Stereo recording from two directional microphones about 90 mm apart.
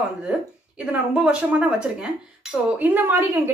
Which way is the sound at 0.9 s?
15° right (ahead or behind).